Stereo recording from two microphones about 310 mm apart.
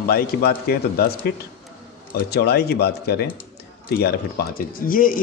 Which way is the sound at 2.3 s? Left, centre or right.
Left.